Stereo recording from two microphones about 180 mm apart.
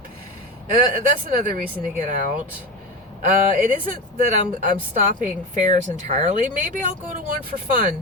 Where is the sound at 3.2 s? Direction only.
45° right (ahead or behind).